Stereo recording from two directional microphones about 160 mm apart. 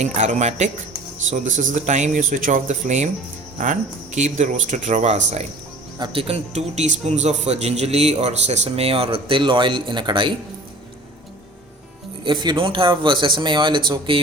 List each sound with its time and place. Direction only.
0.0 s a man's voice: 45° right (ahead or behind); by 10.3 s 30° right (ahead or behind)
12.2 s a man's voice: 30° right (ahead or behind)